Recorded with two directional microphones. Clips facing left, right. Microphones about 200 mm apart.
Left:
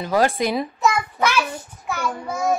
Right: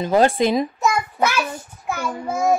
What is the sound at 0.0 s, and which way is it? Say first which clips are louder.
Speech: right 3 dB; 25° right (ahead or behind).